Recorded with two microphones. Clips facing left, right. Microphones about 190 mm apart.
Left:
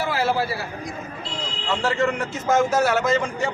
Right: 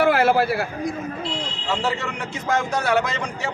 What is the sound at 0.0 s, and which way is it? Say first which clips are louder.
Speech: right 5 dB; 60° right (ahead or behind).